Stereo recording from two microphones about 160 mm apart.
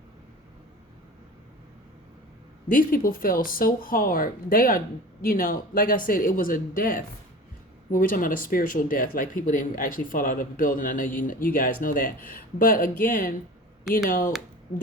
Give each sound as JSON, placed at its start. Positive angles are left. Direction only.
{"t": 2.6, "sound": "speech", "side_deg": 60}